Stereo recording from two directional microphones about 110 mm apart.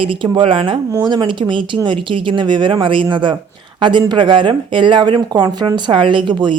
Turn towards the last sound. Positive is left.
turn(degrees=-45)  # may be behind; listen again after turning